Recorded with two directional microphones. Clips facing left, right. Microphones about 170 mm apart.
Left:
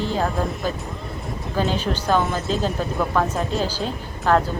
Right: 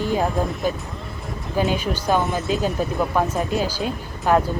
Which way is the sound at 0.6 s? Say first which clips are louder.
Right 2 dB; 15° right (ahead or behind).